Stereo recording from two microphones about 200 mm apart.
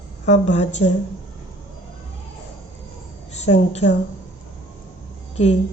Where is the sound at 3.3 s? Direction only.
35° left (ahead or behind).